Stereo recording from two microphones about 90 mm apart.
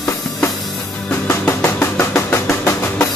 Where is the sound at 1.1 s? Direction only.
30° left (ahead or behind).